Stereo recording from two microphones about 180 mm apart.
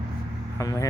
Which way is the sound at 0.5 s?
20° left (ahead or behind).